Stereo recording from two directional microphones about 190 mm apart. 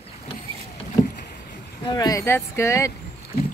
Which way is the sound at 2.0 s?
20° left (ahead or behind).